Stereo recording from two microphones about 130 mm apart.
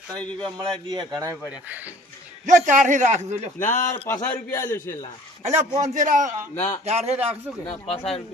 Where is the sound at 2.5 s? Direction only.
75° right (ahead or behind).